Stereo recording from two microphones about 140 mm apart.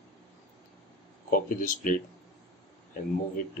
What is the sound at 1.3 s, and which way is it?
Speech, 85° left.